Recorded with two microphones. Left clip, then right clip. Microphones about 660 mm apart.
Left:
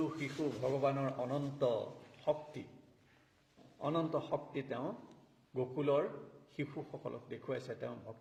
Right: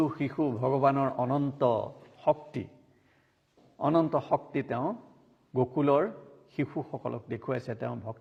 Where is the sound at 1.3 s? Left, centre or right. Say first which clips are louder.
Right 7 dB; right.